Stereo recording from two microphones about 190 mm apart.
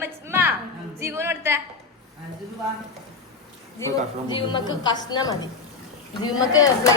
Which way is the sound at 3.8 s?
20° left (ahead or behind).